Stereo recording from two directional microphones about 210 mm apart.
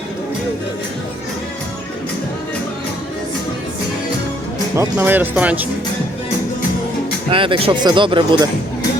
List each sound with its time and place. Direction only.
4.7 s speech: 10° right (ahead or behind)
7.3 s speech: 25° right (ahead or behind)